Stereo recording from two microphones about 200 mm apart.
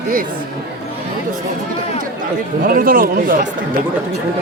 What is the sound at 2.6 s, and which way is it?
Speech, 45° right (ahead or behind).